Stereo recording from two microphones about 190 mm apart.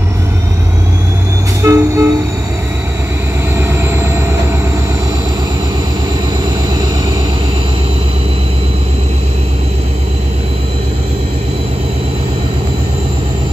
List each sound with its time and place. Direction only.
1.6 s train: 15° right (ahead or behind)
3.5 s vehicle: 15° right (ahead or behind)